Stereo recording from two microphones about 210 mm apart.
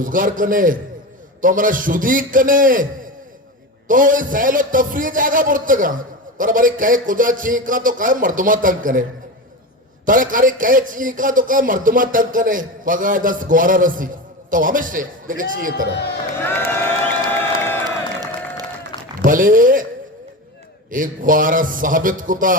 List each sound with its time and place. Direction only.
0.0 s a man's voice: 40° right (ahead or behind)
10.1 s a man's voice: 40° right (ahead or behind)
16.5 s crowd: 10° left (ahead or behind)
19.2 s speech: 40° right (ahead or behind)
20.9 s a man's voice: 40° right (ahead or behind)